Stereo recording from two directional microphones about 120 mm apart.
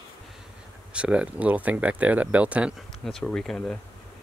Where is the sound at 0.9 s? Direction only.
10° right (ahead or behind).